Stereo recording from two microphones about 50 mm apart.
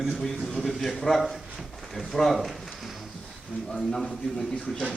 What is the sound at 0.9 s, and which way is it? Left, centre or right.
A man's voice, centre.